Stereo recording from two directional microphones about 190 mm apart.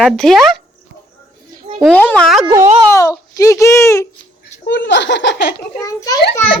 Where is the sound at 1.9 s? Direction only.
10° left (ahead or behind).